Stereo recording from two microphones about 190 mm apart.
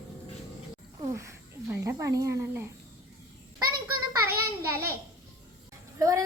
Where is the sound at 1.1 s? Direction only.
15° right (ahead or behind).